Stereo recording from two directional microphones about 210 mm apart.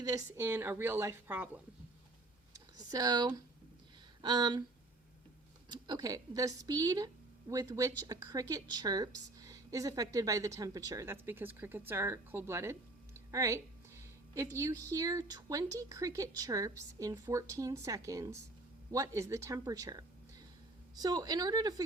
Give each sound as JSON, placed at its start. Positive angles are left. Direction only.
{"t": 0.0, "sound": "a woman's voice", "side_deg": -15}
{"t": 2.7, "sound": "speech", "side_deg": -20}
{"t": 5.6, "sound": "a woman's voice", "side_deg": -20}